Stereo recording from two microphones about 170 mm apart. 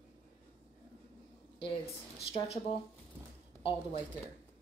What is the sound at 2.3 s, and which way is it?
Speech, 35° left (ahead or behind).